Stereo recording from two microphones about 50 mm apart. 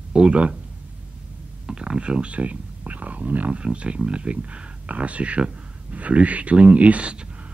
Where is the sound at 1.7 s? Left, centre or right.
Centre.